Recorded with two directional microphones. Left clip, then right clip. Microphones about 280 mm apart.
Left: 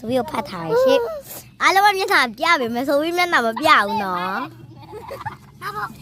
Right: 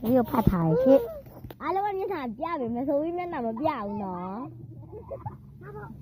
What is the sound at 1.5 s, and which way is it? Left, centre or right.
A child's voice, centre.